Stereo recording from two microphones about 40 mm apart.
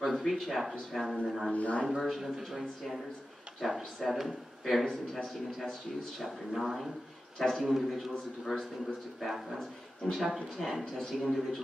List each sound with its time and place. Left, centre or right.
0.0 s a man's voice: centre
1.5 s speech: left
1.9 s a man's voice: centre